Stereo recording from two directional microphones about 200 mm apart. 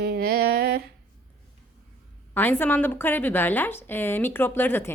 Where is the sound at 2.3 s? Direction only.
10° left (ahead or behind).